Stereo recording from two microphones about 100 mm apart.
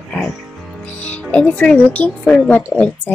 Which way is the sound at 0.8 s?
15° left (ahead or behind).